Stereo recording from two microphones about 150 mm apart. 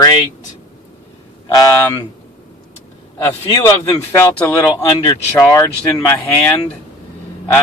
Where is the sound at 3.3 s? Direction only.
30° left (ahead or behind).